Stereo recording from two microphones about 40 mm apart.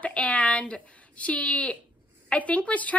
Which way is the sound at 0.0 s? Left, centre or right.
Left.